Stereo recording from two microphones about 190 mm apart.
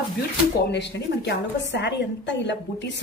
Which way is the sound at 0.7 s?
65° left (ahead or behind).